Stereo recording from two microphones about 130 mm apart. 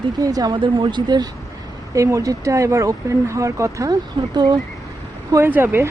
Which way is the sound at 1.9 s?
25° right (ahead or behind).